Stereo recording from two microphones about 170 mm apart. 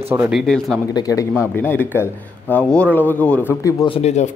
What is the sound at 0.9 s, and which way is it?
A man's voice, 20° left (ahead or behind).